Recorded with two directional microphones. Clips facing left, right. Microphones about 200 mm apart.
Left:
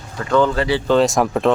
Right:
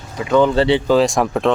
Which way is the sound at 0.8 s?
Centre (ahead or behind).